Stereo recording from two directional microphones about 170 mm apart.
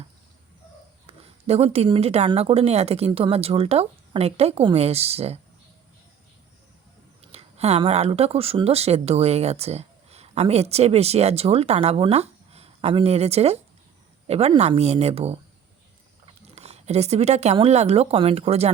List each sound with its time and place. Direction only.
1.0 s a woman's voice: 35° right (ahead or behind)
7.3 s speech: 35° right (ahead or behind)